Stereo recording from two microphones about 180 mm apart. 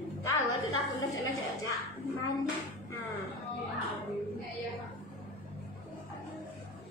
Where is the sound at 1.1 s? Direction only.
20° left (ahead or behind).